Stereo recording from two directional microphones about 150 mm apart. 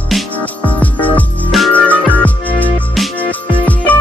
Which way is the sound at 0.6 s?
10° left (ahead or behind).